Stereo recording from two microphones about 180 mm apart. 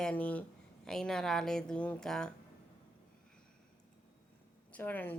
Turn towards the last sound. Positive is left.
turn(degrees=10)  # may be behind; listen again after turning